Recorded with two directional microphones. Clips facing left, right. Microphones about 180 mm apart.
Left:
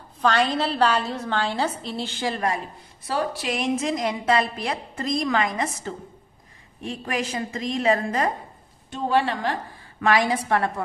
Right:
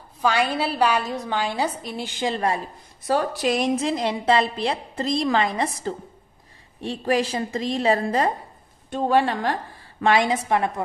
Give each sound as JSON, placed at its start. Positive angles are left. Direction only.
{"t": 0.2, "sound": "a woman's voice", "side_deg": -10}
{"t": 3.1, "sound": "a woman's voice", "side_deg": -45}
{"t": 8.9, "sound": "a woman's voice", "side_deg": -50}
{"t": 9.9, "sound": "a woman's voice", "side_deg": -25}